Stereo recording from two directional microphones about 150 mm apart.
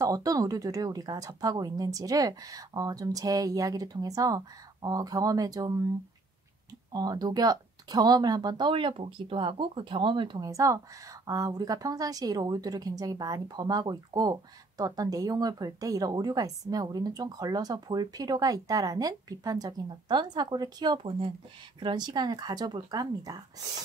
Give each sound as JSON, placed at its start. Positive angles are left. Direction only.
{"t": 0.0, "sound": "speech", "side_deg": -25}
{"t": 6.9, "sound": "speech", "side_deg": -25}